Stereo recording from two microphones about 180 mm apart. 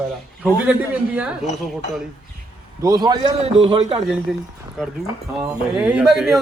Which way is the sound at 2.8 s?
20° right (ahead or behind).